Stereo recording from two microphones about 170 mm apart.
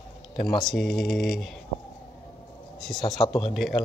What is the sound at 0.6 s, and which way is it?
Speech, centre (ahead or behind).